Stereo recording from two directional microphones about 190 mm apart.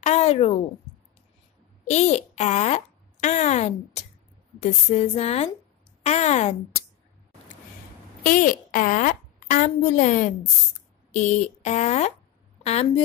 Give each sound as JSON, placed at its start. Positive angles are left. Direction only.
{"t": 0.0, "sound": "a woman's voice", "side_deg": 35}
{"t": 1.9, "sound": "a child's voice", "side_deg": 35}
{"t": 8.2, "sound": "a woman's voice", "side_deg": 45}